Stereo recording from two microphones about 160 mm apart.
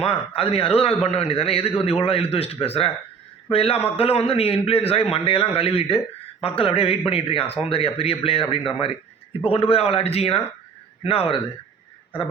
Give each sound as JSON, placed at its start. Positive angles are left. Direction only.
{"t": 0.0, "sound": "a man's voice", "side_deg": 35}